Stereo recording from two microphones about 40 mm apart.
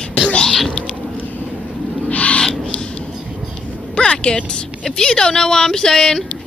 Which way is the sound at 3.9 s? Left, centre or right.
Left.